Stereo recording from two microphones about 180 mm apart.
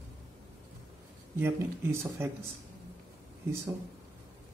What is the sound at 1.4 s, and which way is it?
Speech, 15° right (ahead or behind).